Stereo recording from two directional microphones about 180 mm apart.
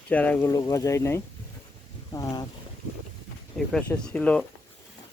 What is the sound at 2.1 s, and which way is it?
Boat, 20° left (ahead or behind).